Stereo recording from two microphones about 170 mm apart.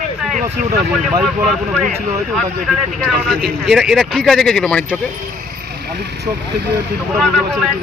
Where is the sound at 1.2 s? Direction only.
Centre (ahead or behind).